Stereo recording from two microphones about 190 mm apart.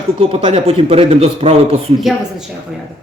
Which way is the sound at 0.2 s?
30° right (ahead or behind).